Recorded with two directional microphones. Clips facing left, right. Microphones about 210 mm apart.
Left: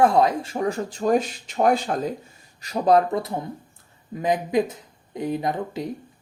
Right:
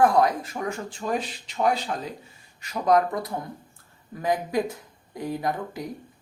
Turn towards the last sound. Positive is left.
turn(degrees=20)  # may be behind; listen again after turning